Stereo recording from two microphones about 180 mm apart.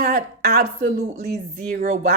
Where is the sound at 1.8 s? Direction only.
55° right (ahead or behind).